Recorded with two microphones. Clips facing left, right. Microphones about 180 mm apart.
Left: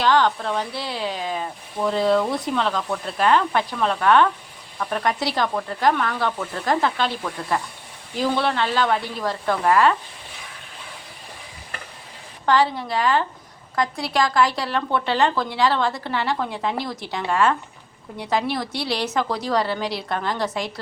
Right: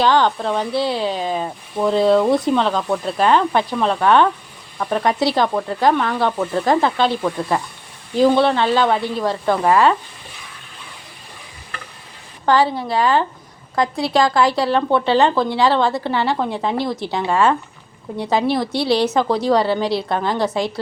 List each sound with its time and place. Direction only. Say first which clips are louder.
0.0 s a woman's voice: right 3 dB; 30° right (ahead or behind)
12.5 s a woman's voice: right 3 dB; 30° right (ahead or behind)